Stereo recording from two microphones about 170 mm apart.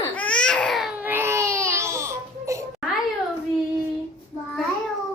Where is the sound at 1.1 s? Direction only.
15° right (ahead or behind).